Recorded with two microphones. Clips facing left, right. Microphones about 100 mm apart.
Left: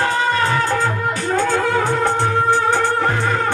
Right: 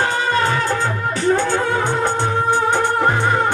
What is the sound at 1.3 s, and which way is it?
Music, 25° right (ahead or behind).